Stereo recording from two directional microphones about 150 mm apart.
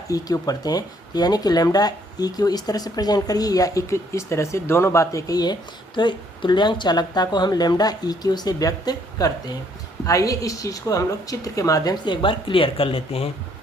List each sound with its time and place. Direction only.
0.1 s speech: 25° left (ahead or behind)